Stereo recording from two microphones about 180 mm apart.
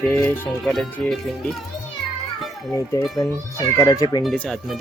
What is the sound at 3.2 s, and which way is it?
Speech, 15° left (ahead or behind).